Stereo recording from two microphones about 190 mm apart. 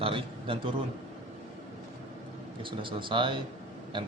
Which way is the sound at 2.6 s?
25° right (ahead or behind).